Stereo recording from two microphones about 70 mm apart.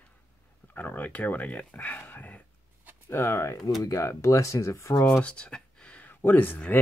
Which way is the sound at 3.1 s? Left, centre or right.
Left.